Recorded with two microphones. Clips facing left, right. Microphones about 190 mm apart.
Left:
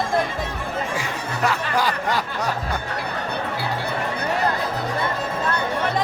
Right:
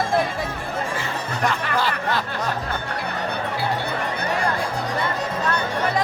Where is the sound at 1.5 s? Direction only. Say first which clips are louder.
Left 1 dB; 10° left (ahead or behind).